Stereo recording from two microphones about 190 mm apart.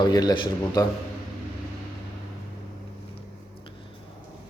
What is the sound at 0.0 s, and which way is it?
Speech, 20° left (ahead or behind).